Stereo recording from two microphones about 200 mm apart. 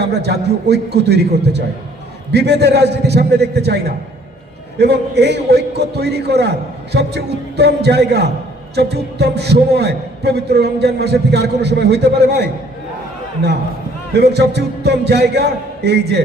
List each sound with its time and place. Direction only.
0.0 s a man's voice: 55° right (ahead or behind)
4.8 s a man's voice: 55° right (ahead or behind)
14.2 s a man's voice: 55° right (ahead or behind)